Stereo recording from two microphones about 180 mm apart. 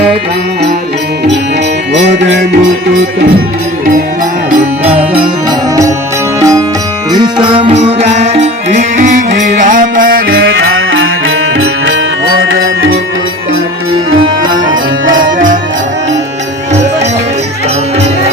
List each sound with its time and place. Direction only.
4.8 s music: 30° right (ahead or behind)
6.4 s music: 15° right (ahead or behind); by 13.0 s 90° right
14.5 s music: 90° right